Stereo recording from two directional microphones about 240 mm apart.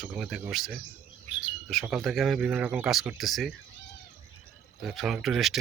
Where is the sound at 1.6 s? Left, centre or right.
Centre.